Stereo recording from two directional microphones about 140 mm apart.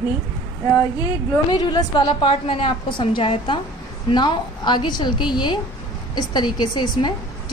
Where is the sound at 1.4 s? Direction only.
30° left (ahead or behind).